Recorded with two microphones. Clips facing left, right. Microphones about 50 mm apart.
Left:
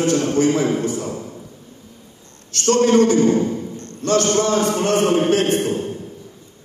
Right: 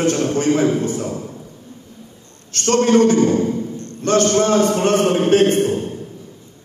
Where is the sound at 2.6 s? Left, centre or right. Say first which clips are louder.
Right 1 dB; right.